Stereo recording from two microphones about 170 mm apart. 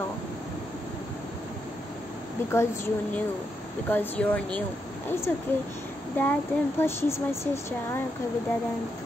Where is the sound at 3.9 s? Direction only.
10° left (ahead or behind).